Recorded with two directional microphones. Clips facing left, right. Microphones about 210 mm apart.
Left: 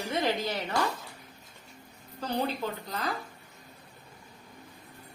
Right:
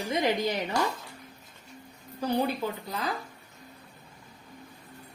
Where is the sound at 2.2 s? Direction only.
10° right (ahead or behind).